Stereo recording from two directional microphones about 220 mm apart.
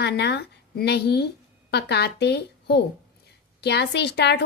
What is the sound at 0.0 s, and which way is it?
A woman's voice, 50° left (ahead or behind).